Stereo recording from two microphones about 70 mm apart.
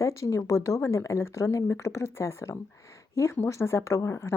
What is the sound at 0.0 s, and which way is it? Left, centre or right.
Speech, left.